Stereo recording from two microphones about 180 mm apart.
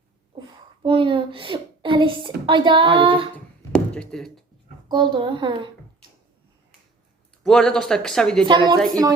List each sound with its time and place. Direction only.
0.3 s a woman's voice: 25° right (ahead or behind)
3.7 s a sound: 5° left (ahead or behind)
4.9 s a child's voice: 25° right (ahead or behind)
7.4 s speech: 5° left (ahead or behind)
8.4 s a child's voice: 25° right (ahead or behind)